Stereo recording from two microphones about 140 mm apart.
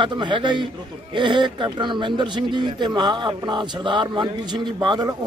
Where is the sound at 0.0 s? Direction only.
35° right (ahead or behind).